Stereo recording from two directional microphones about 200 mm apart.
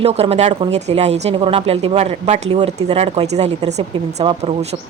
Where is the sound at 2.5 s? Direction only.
20° right (ahead or behind).